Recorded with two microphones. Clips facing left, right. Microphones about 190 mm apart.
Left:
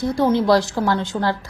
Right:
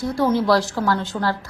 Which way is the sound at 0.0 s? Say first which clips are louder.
Left 2 dB; 15° left (ahead or behind).